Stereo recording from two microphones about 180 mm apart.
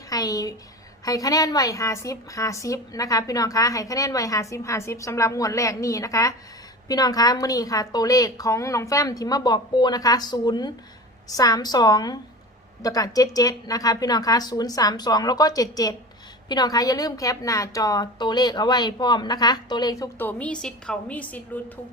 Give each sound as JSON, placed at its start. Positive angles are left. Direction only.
{"t": 0.1, "sound": "a woman's voice", "side_deg": 20}